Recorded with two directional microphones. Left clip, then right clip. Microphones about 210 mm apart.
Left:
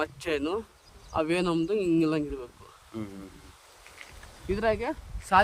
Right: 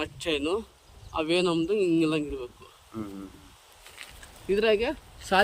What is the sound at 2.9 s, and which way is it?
Speech, 40° left (ahead or behind).